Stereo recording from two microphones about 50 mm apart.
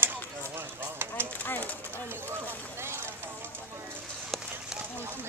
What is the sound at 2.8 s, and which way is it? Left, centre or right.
Vehicle, right.